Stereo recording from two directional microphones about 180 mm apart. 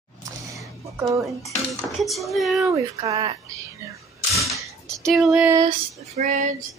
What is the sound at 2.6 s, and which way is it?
Speech, 20° right (ahead or behind).